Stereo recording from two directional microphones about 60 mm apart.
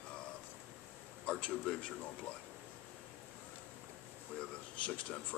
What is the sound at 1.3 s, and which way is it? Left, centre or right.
Speech, centre.